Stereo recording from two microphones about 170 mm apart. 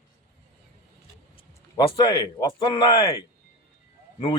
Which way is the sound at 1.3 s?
25° left (ahead or behind).